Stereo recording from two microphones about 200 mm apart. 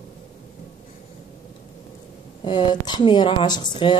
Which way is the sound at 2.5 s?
20° left (ahead or behind).